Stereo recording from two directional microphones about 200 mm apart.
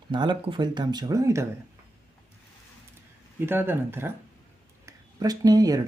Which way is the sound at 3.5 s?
10° right (ahead or behind).